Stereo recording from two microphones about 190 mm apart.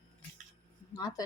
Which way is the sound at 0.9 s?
20° left (ahead or behind).